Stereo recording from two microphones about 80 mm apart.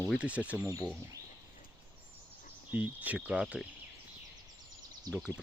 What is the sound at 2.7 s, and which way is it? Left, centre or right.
Speech, centre.